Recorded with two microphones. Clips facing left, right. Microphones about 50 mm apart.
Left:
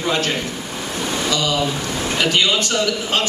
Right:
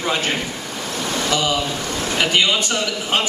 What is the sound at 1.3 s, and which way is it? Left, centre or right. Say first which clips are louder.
A man's voice: even; centre.